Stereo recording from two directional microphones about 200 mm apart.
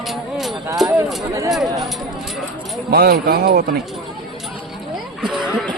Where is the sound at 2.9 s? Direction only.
50° right (ahead or behind).